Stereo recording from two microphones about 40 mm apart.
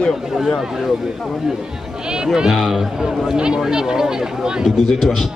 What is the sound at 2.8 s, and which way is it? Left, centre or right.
Speech, centre.